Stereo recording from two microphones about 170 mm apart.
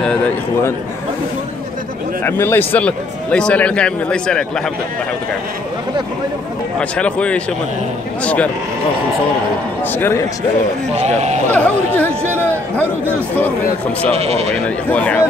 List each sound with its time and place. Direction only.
0.0 s a man's voice: 5° left (ahead or behind)
2.2 s a man's voice: 15° left (ahead or behind)
6.8 s a man's voice: 5° left (ahead or behind)
9.9 s a man's voice: 15° left (ahead or behind)
11.1 s speech: 40° right (ahead or behind)
11.5 s a man's voice: 10° left (ahead or behind)
12.4 s a sound: 10° left (ahead or behind)
14.1 s speech: 40° right (ahead or behind)
14.5 s a man's voice: 5° left (ahead or behind)